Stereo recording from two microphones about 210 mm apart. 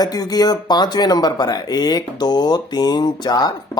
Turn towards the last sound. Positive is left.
turn(degrees=20)  # may be behind; listen again after turning